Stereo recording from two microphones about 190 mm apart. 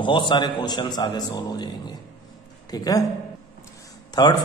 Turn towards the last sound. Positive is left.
turn(degrees=20)  # may be behind; listen again after turning